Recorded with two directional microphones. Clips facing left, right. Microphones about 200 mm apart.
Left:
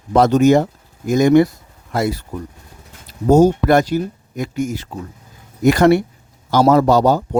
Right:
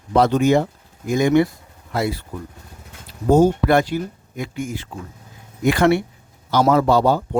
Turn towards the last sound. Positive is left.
turn(degrees=40)  # may be behind; listen again after turning